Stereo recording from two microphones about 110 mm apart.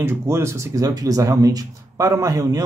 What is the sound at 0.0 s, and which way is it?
Speech, 25° right (ahead or behind).